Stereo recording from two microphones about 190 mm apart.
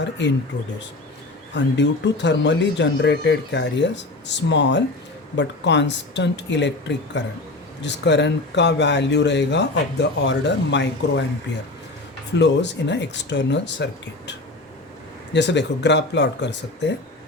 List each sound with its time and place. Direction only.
0.0 s speech: 70° left (ahead or behind)
1.5 s speech: 65° left (ahead or behind)
12.3 s speech: 65° left (ahead or behind)